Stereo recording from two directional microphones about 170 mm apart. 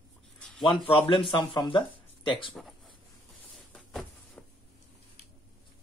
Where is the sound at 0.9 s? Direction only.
30° left (ahead or behind).